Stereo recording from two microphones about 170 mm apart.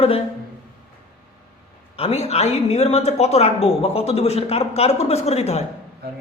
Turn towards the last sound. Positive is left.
turn(degrees=40)  # may be behind; listen again after turning